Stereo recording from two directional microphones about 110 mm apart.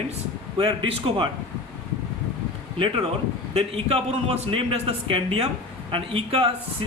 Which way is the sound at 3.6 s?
65° right (ahead or behind).